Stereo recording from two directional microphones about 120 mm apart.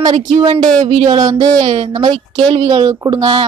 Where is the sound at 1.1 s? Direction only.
30° right (ahead or behind).